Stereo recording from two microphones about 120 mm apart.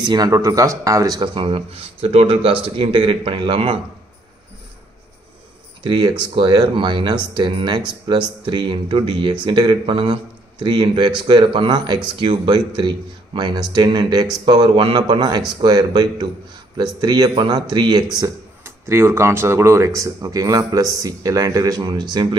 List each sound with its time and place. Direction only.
0.1 s speech: 30° right (ahead or behind); by 3.7 s 50° right (ahead or behind)
5.9 s speech: 45° right (ahead or behind)
18.6 s speech: 20° right (ahead or behind); by 22.4 s 40° right (ahead or behind)